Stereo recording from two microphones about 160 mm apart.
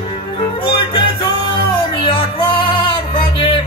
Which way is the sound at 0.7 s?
35° left (ahead or behind).